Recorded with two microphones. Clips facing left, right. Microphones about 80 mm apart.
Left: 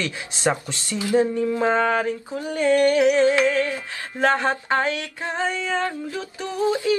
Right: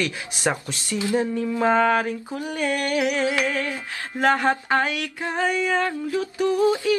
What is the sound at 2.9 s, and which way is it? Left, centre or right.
Music, centre.